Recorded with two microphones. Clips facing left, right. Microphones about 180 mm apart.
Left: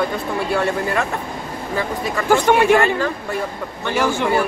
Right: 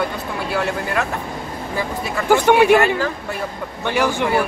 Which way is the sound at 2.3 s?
10° right (ahead or behind).